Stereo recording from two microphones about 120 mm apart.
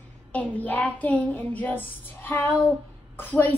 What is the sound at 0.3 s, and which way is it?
Child singing, 15° left (ahead or behind).